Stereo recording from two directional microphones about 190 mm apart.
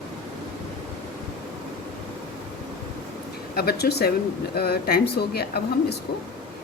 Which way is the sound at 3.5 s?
55° left (ahead or behind).